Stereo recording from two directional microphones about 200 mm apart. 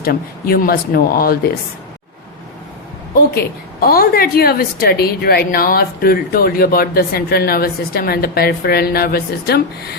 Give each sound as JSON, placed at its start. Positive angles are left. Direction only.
{"t": 0.0, "sound": "a woman's voice", "side_deg": 50}
{"t": 3.2, "sound": "a woman's voice", "side_deg": 50}